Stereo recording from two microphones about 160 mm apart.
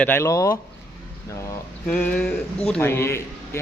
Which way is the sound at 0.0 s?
15° left (ahead or behind).